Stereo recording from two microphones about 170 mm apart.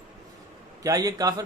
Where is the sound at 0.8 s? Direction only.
20° right (ahead or behind).